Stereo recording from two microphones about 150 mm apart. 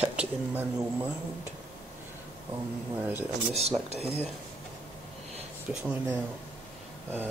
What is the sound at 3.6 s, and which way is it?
Speech, 45° right (ahead or behind).